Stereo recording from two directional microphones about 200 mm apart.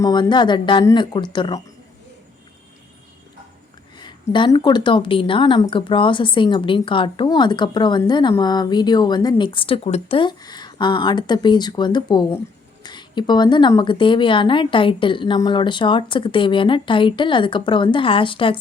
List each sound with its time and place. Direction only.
0.0 s a woman's voice: 20° left (ahead or behind)
3.9 s a woman's voice: 25° left (ahead or behind)